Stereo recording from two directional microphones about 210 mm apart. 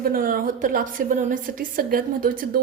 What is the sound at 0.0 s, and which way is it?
A woman's voice, 45° right (ahead or behind).